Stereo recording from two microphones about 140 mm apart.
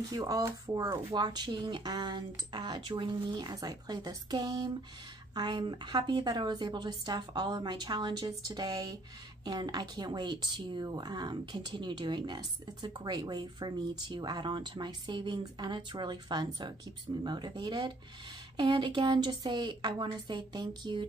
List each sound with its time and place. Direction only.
0.1 s a woman's voice: 25° right (ahead or behind)